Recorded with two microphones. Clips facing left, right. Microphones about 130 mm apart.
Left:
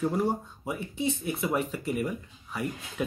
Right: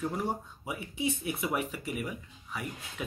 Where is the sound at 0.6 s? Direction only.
10° right (ahead or behind).